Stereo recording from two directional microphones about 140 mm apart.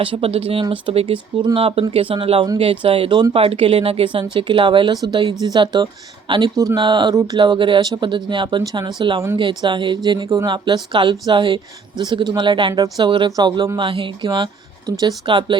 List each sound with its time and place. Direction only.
0.0 s speech: 40° right (ahead or behind)
6.6 s speech: 20° right (ahead or behind)
6.8 s speech: 35° right (ahead or behind)